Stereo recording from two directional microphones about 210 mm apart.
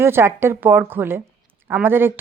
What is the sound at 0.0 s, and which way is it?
Speech, 10° right (ahead or behind).